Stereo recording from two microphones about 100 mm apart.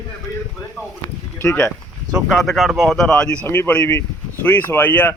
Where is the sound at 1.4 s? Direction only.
30° left (ahead or behind).